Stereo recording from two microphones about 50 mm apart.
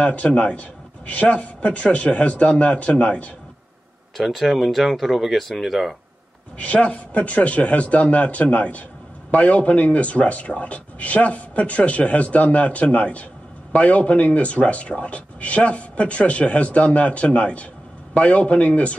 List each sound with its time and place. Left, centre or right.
0.0 s a man's voice: left
4.2 s speech: centre
6.6 s speech: left